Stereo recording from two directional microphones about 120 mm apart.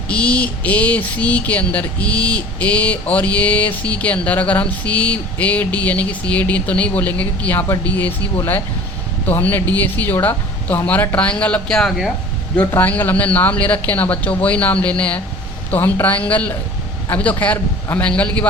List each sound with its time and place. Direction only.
0.1 s speech: 10° left (ahead or behind)
12.5 s speech: 15° left (ahead or behind)